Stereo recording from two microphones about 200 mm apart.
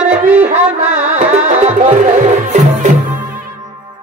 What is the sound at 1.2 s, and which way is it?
Music, 35° right (ahead or behind).